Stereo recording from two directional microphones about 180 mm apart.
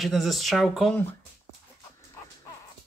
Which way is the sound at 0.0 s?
Centre (ahead or behind).